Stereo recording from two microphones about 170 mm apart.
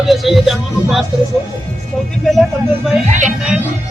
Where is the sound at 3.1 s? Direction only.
45° right (ahead or behind).